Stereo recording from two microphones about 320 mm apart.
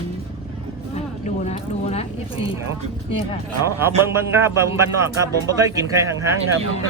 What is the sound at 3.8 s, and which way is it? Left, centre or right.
Speech, centre.